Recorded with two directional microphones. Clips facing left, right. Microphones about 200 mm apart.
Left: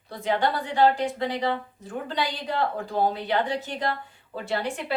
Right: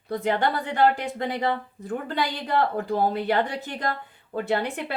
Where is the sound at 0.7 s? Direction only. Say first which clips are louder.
Left 2 dB; 55° right (ahead or behind).